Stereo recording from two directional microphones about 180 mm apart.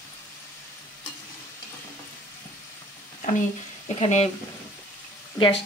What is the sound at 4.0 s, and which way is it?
Speech, 35° left (ahead or behind).